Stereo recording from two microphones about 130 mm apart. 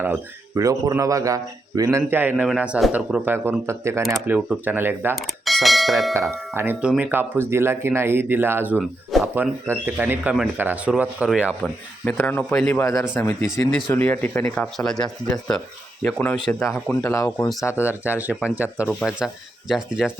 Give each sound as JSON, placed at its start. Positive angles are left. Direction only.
{"t": 0.5, "sound": "a man's voice", "side_deg": -25}
{"t": 4.3, "sound": "speech", "side_deg": -10}
{"t": 5.2, "sound": "bell", "side_deg": 0}
{"t": 6.3, "sound": "a man's voice", "side_deg": -20}
{"t": 11.6, "sound": "speech", "side_deg": 10}
{"t": 12.8, "sound": "speech", "side_deg": 25}
{"t": 16.6, "sound": "speech", "side_deg": 0}
{"t": 17.0, "sound": "speech", "side_deg": 20}
{"t": 18.0, "sound": "speech", "side_deg": -15}